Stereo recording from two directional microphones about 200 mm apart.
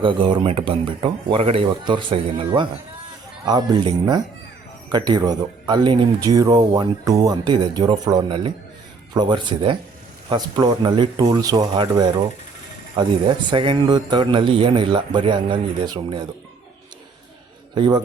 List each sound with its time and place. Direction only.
0.0 s speech: 25° right (ahead or behind)
17.7 s speech: 20° right (ahead or behind)